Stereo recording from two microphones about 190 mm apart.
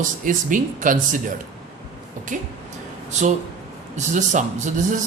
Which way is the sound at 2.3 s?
40° right (ahead or behind).